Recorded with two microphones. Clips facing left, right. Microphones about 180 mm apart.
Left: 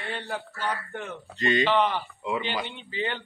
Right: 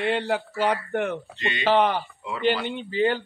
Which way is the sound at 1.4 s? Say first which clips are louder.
Left 6 dB; 40° left (ahead or behind).